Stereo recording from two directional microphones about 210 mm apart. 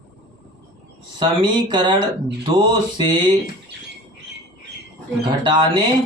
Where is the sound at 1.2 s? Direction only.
20° right (ahead or behind).